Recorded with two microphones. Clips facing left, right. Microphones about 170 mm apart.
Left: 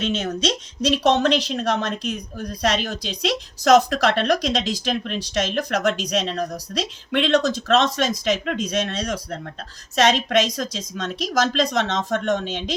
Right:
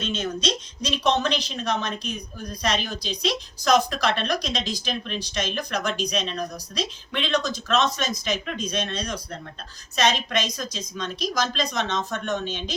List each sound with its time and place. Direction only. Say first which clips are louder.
0.3 s a woman's voice: left 4 dB; 75° left (ahead or behind)